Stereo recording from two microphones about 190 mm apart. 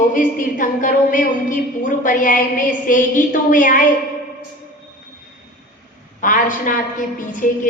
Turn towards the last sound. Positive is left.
turn(degrees=45)  # may be behind; listen again after turning